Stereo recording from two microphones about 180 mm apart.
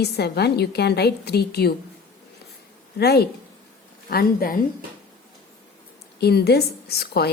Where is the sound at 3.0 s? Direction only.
65° left (ahead or behind).